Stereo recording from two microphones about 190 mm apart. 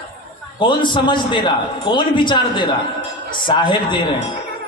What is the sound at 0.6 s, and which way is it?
A man's voice, 25° left (ahead or behind).